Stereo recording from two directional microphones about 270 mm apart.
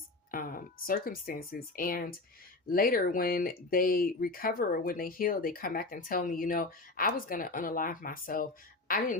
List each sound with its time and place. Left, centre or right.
0.3 s a woman's voice: left